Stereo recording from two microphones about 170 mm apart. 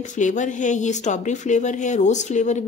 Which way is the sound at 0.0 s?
45° left (ahead or behind).